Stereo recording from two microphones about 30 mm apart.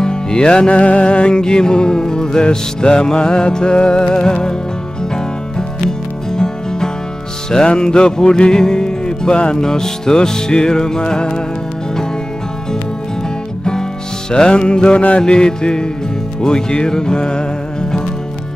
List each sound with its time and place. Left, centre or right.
0.0 s music: left
0.7 s music: left
14.3 s music: left